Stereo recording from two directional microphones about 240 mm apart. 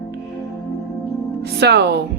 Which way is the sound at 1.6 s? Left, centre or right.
Right.